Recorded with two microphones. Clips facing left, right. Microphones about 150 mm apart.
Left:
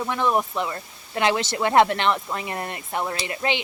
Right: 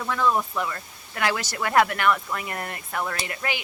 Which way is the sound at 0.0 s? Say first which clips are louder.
Left 1 dB; 20° left (ahead or behind).